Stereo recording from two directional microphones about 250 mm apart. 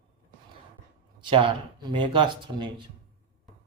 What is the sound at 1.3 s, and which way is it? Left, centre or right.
Speech, centre.